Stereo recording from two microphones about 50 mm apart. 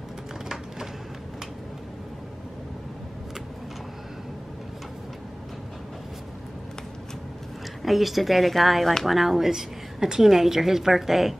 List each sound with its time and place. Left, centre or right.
7.8 s speech: centre